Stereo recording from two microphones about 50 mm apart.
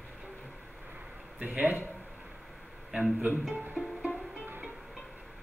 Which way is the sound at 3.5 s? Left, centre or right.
Right.